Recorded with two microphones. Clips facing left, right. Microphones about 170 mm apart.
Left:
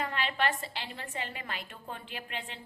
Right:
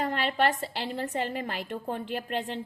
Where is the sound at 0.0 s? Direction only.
40° right (ahead or behind).